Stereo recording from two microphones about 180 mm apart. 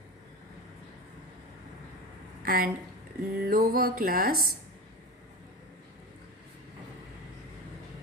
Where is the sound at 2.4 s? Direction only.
55° right (ahead or behind).